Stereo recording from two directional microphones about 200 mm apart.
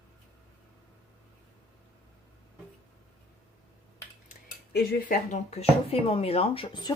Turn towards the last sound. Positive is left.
turn(degrees=25)  # may be behind; listen again after turning